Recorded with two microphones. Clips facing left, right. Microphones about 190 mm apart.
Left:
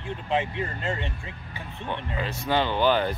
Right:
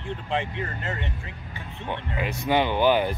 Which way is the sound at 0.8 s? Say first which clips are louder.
Left 2 dB; 25° left (ahead or behind).